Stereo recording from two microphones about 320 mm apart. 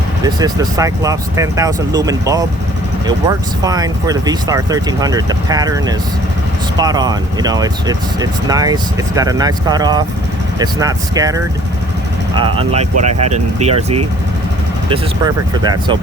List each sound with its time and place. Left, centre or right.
0.3 s speech: centre
14.8 s speech: centre